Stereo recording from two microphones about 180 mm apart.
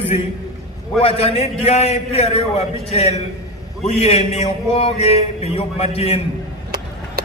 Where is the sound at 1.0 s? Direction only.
35° left (ahead or behind).